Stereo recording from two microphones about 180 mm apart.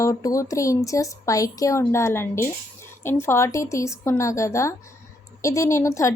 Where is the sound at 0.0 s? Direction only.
20° left (ahead or behind).